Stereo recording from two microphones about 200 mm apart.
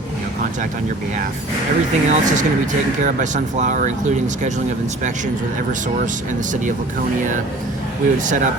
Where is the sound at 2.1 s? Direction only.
40° right (ahead or behind).